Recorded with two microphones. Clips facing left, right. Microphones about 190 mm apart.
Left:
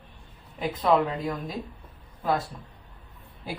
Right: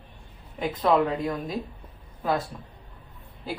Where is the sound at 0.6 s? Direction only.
Centre (ahead or behind).